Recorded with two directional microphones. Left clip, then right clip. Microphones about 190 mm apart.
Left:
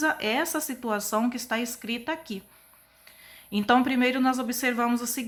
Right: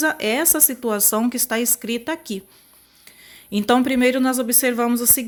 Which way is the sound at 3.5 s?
40° right (ahead or behind).